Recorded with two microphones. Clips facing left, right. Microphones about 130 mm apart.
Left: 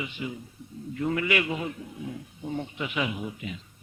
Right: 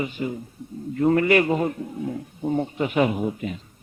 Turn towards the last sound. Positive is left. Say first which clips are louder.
# right 8 dB
turn(degrees=-45)  # may be behind; listen again after turning